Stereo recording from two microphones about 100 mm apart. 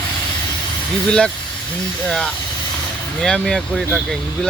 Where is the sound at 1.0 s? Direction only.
10° left (ahead or behind).